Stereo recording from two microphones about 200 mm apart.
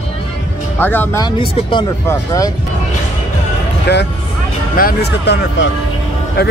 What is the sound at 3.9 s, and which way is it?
Speech, 60° left (ahead or behind).